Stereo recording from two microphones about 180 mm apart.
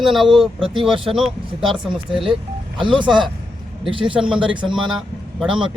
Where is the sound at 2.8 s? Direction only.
25° right (ahead or behind).